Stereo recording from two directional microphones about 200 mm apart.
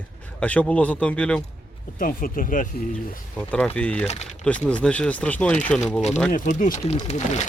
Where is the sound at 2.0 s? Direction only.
45° left (ahead or behind).